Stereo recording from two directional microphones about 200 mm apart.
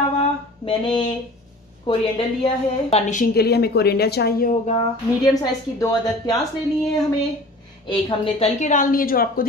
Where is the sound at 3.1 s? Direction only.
45° left (ahead or behind).